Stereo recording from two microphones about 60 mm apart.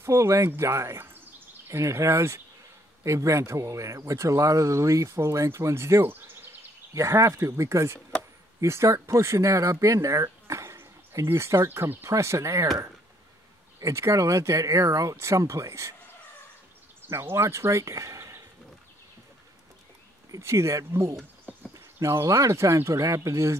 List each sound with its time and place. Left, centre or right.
0.0 s speech: right
1.7 s speech: right
6.9 s speech: right
12.1 s speech: right
13.7 s speech: right
17.2 s speech: right
20.2 s speech: right
22.0 s speech: right